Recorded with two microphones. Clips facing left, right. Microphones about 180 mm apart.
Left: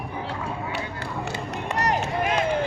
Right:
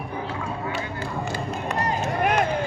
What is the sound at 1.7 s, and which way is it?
Run, 80° left.